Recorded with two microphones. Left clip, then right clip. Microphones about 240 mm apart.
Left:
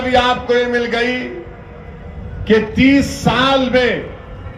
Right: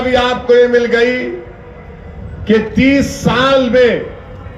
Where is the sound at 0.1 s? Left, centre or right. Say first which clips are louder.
Right 2 dB; left.